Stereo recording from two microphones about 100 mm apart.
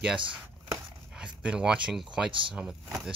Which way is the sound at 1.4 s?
10° right (ahead or behind).